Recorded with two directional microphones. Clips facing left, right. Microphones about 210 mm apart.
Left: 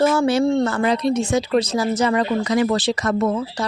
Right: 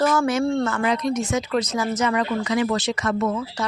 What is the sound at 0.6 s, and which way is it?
Speech, 35° left (ahead or behind).